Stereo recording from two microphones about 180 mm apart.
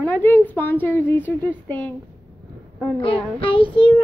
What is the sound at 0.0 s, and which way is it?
A woman's voice, 10° left (ahead or behind).